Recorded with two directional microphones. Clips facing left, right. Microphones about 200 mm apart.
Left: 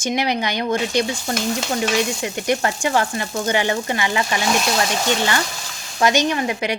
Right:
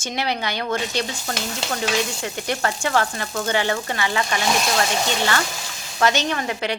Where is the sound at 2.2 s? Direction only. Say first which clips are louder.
Left 4 dB; 15° left (ahead or behind).